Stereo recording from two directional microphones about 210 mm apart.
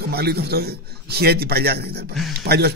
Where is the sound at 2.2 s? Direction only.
Centre (ahead or behind).